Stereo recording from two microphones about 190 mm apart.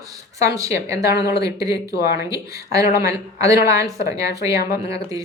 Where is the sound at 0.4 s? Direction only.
15° right (ahead or behind).